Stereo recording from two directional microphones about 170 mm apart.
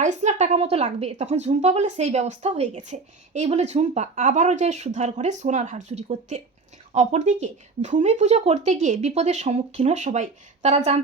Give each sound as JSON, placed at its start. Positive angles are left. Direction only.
{"t": 0.0, "sound": "a woman's voice", "side_deg": -45}